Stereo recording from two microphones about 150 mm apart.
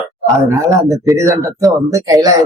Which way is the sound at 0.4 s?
20° right (ahead or behind).